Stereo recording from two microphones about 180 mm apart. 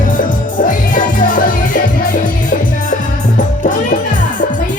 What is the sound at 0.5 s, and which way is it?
Music, 45° left (ahead or behind).